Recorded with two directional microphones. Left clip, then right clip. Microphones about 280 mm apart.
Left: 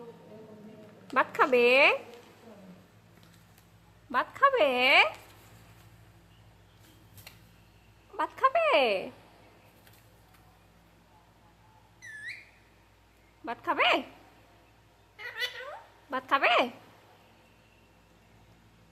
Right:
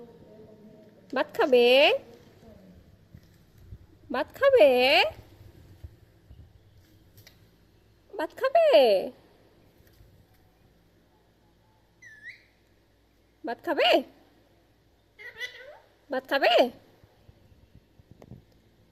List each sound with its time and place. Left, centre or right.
1.1 s speech: centre
4.1 s a woman's voice: centre
8.1 s speech: centre
13.4 s speech: centre
16.0 s speech: centre